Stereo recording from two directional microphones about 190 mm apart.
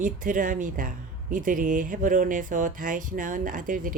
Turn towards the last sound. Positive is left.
turn(degrees=-45)  # may be behind; listen again after turning